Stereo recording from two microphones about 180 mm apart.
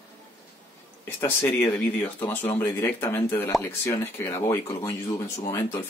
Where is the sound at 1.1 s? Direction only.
10° left (ahead or behind).